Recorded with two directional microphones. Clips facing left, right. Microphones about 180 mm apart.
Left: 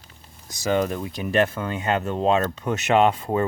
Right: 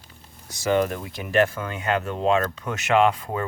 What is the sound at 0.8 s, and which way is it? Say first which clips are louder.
Speech: left 3 dB; 20° left (ahead or behind).